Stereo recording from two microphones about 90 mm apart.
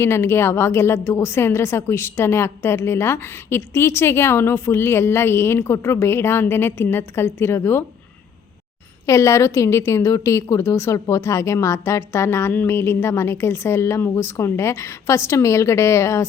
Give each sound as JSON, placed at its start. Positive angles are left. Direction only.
{"t": 0.0, "sound": "a woman's voice", "side_deg": 30}
{"t": 9.0, "sound": "a woman's voice", "side_deg": 35}